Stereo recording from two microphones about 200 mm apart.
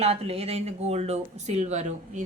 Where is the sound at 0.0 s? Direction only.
30° right (ahead or behind).